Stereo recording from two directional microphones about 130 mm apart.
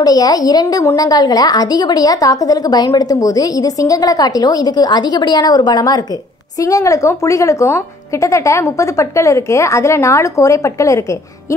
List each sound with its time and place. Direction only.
0.0 s a woman's voice: 30° left (ahead or behind)